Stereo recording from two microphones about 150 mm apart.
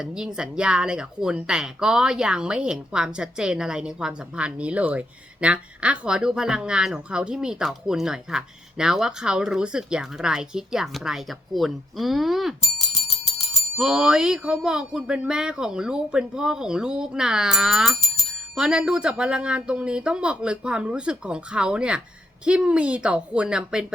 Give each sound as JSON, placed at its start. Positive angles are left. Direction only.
{"t": 0.0, "sound": "speech", "side_deg": -5}
{"t": 12.6, "sound": "bicycle bell", "side_deg": 50}
{"t": 13.7, "sound": "speech", "side_deg": -5}